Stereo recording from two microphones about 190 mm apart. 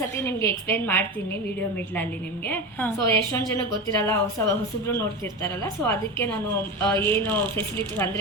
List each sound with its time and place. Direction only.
0.2 s a woman's voice: 10° left (ahead or behind)
2.5 s a woman's voice: 10° left (ahead or behind)